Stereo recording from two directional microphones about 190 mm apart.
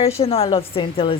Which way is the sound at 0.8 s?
30° left (ahead or behind).